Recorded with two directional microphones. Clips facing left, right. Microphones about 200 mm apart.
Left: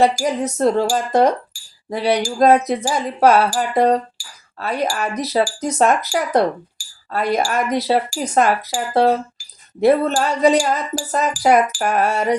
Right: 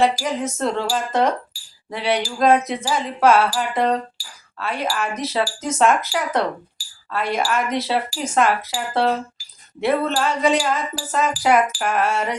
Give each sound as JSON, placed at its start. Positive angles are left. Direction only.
{"t": 0.0, "sound": "speech", "side_deg": 40}
{"t": 1.5, "sound": "chink", "side_deg": 45}
{"t": 1.9, "sound": "speech", "side_deg": 40}